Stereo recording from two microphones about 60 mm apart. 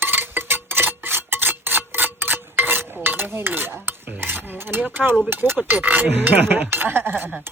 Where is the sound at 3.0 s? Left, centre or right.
Right.